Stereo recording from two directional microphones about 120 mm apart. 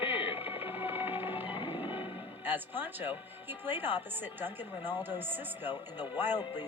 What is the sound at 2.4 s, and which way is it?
Speech, 15° right (ahead or behind).